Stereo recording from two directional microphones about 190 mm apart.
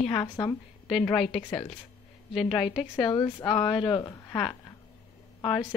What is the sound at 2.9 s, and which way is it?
A woman's voice, 20° left (ahead or behind).